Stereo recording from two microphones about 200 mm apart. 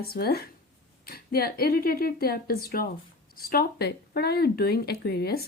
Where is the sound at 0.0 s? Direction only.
50° left (ahead or behind).